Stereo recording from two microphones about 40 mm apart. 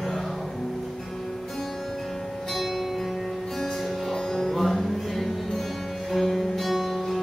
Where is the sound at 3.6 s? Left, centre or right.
Centre.